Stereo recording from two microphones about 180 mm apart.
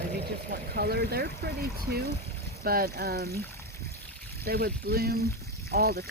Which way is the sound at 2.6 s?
55° right (ahead or behind).